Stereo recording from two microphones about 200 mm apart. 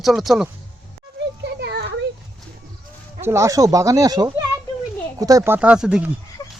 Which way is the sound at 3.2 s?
15° right (ahead or behind).